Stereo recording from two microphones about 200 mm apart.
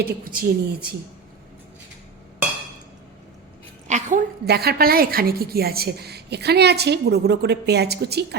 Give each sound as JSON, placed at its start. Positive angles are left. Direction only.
{"t": 0.3, "sound": "a woman's voice", "side_deg": -50}
{"t": 3.8, "sound": "a sound", "side_deg": -35}
{"t": 4.4, "sound": "a woman's voice", "side_deg": -50}